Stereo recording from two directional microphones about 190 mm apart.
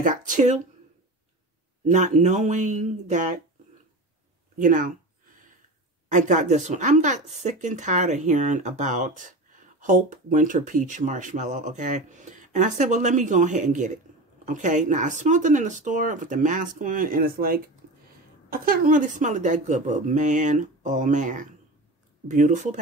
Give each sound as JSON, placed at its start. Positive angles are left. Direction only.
{"t": 0.0, "sound": "speech", "side_deg": -45}
{"t": 1.9, "sound": "speech", "side_deg": -40}
{"t": 4.6, "sound": "speech", "side_deg": -45}
{"t": 6.0, "sound": "speech", "side_deg": -40}